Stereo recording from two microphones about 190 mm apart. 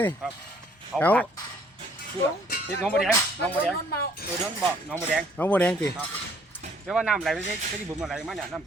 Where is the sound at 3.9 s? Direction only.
55° left (ahead or behind).